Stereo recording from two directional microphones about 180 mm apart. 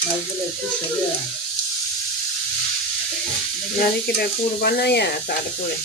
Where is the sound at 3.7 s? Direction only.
60° left (ahead or behind).